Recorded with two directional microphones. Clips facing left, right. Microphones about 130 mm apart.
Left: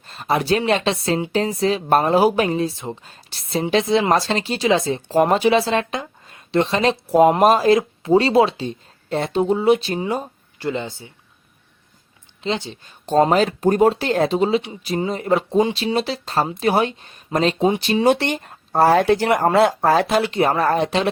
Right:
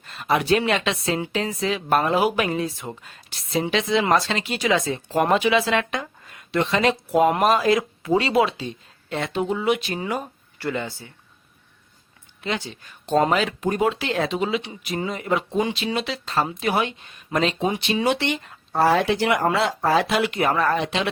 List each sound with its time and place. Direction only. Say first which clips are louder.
0.1 s speech: left 1 dB; 35° left (ahead or behind)
12.4 s speech: left 4 dB; 25° left (ahead or behind)
13.1 s speech: left 4 dB; 35° left (ahead or behind)